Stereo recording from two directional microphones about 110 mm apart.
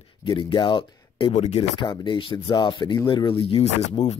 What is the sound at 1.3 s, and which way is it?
Speech, 80° left.